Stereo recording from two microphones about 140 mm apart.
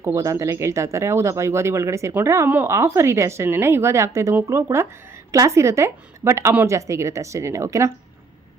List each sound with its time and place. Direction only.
0.0 s speech: 20° right (ahead or behind)